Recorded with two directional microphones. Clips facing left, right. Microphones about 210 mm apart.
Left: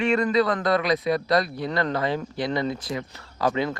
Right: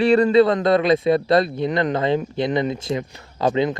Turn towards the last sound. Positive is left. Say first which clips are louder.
# right 5 dB
turn(degrees=-25)  # may be behind; listen again after turning